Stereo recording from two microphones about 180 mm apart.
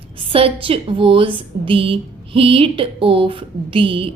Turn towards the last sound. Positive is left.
turn(degrees=-30)  # may be behind; listen again after turning